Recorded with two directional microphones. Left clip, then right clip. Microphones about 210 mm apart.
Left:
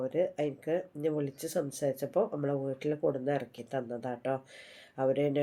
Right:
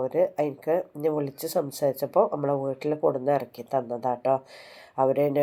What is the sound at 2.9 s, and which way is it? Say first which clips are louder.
Speech: right 8 dB; 40° right (ahead or behind).